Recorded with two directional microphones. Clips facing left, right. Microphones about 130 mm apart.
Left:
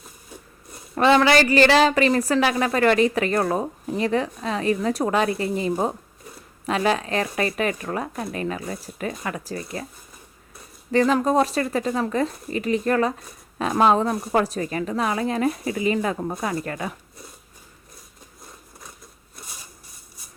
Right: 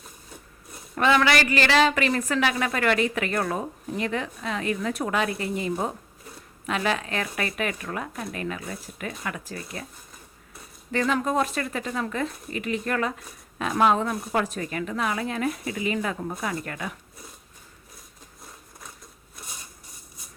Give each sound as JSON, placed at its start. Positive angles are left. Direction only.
{"t": 0.9, "sound": "a woman's voice", "side_deg": 35}
{"t": 10.9, "sound": "a woman's voice", "side_deg": 35}